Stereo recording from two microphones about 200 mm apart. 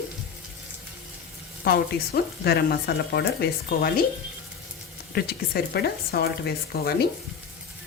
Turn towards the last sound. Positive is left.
turn(degrees=50)  # may be behind; listen again after turning